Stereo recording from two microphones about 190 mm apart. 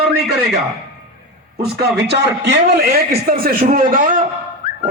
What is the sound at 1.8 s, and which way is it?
A man's voice, 60° right (ahead or behind).